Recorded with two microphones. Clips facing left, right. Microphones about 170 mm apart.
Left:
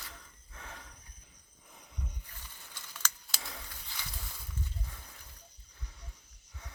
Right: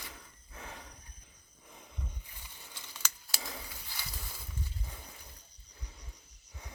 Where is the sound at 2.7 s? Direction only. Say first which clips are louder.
Left 2 dB; 10° right (ahead or behind).